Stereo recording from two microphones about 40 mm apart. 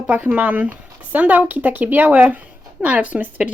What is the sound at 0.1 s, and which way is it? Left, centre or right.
Speech, right.